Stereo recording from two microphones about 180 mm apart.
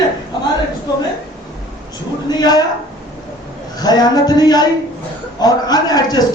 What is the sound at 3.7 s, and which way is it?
A man's voice, 20° left (ahead or behind).